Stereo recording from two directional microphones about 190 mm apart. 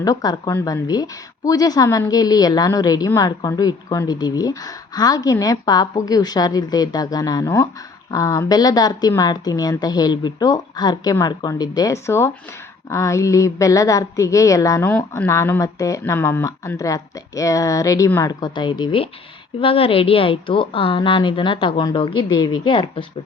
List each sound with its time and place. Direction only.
0.0 s a woman's voice: 20° left (ahead or behind)